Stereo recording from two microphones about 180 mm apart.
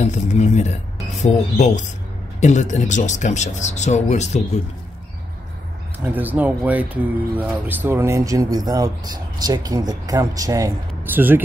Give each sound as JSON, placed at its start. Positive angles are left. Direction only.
{"t": 0.0, "sound": "speech", "side_deg": 40}
{"t": 6.0, "sound": "speech", "side_deg": -10}